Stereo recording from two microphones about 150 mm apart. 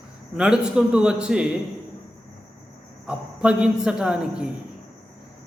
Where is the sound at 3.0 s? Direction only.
5° right (ahead or behind).